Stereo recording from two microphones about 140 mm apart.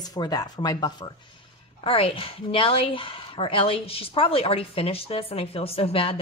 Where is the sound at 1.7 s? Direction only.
40° left (ahead or behind).